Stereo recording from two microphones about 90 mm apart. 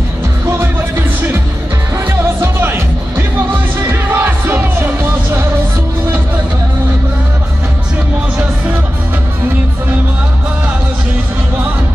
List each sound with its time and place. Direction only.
2.2 s music: 25° right (ahead or behind)